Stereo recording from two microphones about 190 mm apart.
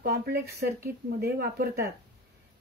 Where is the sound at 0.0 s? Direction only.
55° right (ahead or behind).